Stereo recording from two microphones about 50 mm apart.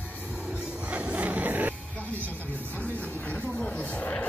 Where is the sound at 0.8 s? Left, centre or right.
Right.